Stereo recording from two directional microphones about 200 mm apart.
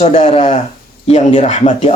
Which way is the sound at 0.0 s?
30° left (ahead or behind).